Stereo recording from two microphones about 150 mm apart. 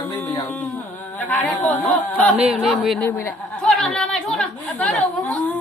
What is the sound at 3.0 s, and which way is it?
Speech, 15° left (ahead or behind).